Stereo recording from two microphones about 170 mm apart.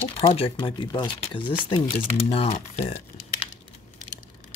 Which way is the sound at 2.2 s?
45° left (ahead or behind).